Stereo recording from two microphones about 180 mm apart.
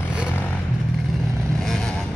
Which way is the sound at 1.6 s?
5° left (ahead or behind).